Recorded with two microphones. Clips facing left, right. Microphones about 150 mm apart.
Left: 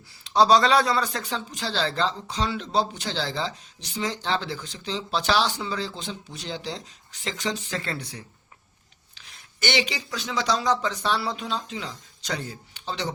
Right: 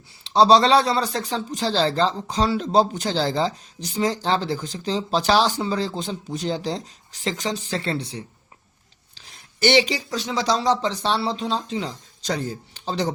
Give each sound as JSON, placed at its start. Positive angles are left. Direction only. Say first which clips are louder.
{"t": 0.3, "sound": "speech", "louder": "right 3 dB", "side_deg": -30}